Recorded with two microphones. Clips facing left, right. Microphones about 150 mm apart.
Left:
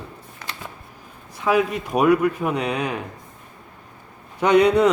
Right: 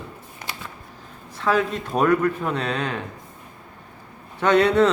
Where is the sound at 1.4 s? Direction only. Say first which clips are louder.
Left 2 dB; 10° left (ahead or behind).